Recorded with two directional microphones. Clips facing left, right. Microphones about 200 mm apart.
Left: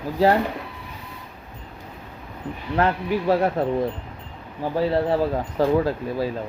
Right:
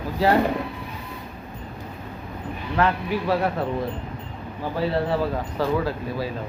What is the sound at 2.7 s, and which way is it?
Speech, 40° left (ahead or behind).